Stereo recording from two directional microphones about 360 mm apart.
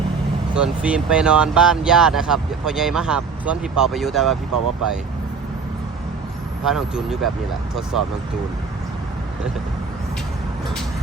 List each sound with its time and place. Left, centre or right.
0.5 s speech: centre
4.5 s speech: right
6.7 s speech: centre